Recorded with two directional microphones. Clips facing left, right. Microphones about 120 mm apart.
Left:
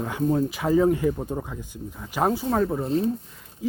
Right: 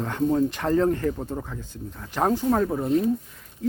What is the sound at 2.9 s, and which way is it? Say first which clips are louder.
Speech: right 2 dB; 30° left (ahead or behind).